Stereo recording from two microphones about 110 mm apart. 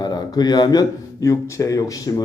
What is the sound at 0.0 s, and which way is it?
Speech, 40° left (ahead or behind).